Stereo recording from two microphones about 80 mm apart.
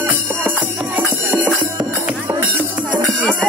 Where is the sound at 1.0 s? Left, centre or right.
Centre.